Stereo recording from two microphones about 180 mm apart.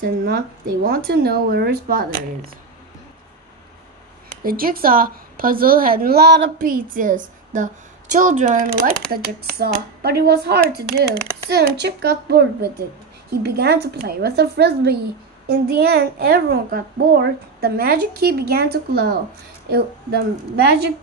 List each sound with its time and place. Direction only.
0.0 s a child's voice: 55° right (ahead or behind)
4.4 s a woman's voice: 55° right (ahead or behind)
9.1 s a child's voice: 60° right (ahead or behind)